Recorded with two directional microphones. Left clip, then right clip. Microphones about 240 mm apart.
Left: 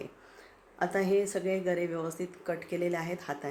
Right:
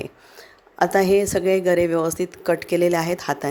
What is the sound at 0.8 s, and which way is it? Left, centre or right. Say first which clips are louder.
A woman's voice: right 11 dB; right.